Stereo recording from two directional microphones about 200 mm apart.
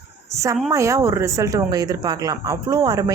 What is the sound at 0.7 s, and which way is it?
A woman's voice, 15° right (ahead or behind).